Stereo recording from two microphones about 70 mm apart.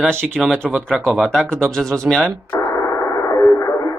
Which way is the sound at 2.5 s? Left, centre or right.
Left.